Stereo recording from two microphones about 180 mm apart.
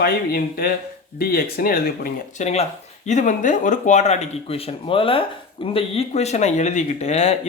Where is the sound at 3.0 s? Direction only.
45° left (ahead or behind).